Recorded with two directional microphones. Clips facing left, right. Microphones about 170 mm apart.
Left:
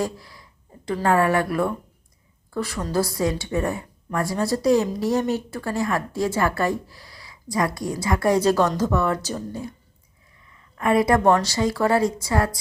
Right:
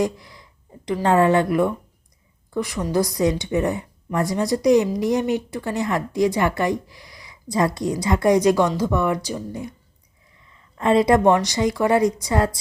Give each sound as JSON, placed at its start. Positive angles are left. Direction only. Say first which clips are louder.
{"t": 0.0, "sound": "a woman's voice", "louder": "right 4 dB", "side_deg": -20}